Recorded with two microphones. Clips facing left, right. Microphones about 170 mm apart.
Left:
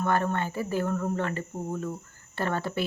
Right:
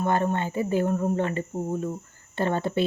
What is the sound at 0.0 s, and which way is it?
Speech, 20° right (ahead or behind).